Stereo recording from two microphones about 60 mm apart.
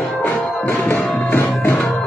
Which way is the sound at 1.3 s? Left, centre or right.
Left.